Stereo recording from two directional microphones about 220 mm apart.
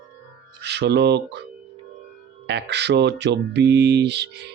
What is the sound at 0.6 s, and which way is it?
Speech, 50° right (ahead or behind).